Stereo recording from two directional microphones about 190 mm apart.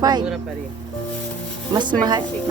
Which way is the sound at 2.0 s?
20° right (ahead or behind).